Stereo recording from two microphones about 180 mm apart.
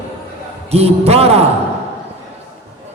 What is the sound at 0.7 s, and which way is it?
Speech, 35° right (ahead or behind).